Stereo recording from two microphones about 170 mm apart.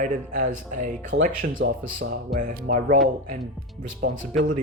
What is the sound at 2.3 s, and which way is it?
Speech, 45° right (ahead or behind).